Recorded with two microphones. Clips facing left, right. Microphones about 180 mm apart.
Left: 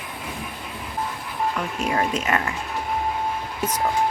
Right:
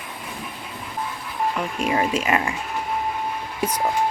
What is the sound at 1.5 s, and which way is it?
Speech, 10° right (ahead or behind).